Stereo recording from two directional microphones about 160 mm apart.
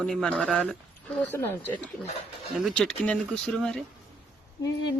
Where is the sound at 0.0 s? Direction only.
5° left (ahead or behind).